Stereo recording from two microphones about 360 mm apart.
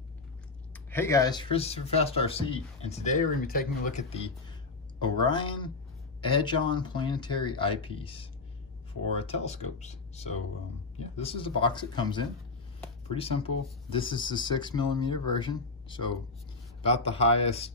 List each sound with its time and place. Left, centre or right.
0.7 s speech: centre